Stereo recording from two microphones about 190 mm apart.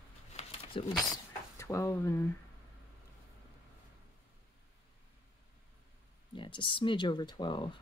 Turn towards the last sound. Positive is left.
turn(degrees=25)  # may be behind; listen again after turning